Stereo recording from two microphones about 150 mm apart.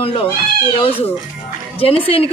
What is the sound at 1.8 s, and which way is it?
Speech, 40° left (ahead or behind).